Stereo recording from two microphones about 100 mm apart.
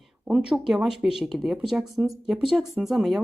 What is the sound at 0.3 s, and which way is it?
A woman's voice, 5° right (ahead or behind).